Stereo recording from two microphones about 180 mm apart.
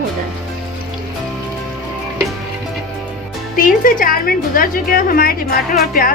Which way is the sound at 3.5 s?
50° left (ahead or behind).